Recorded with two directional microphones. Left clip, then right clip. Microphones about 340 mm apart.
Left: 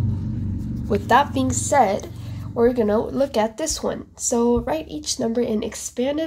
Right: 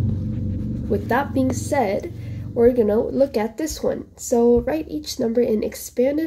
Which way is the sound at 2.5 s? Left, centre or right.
Left.